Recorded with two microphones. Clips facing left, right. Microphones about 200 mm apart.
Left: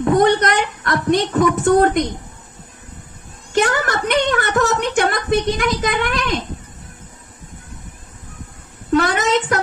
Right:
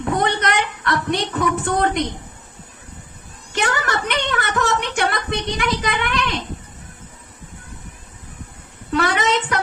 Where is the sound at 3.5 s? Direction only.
45° left (ahead or behind).